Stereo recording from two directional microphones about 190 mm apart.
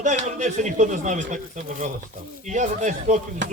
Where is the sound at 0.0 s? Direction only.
40° right (ahead or behind).